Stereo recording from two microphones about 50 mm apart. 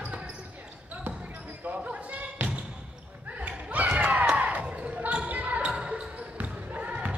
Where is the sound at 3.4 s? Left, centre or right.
Right.